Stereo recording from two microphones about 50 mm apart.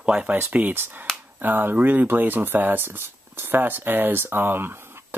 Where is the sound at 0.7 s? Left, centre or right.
Right.